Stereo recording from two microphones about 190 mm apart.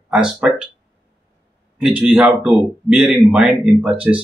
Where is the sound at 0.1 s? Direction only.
5° right (ahead or behind).